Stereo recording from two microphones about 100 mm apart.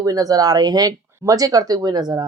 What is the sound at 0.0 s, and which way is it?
Speech, 35° right (ahead or behind).